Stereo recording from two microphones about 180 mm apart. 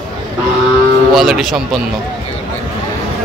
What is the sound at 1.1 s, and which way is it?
Speech, centre (ahead or behind).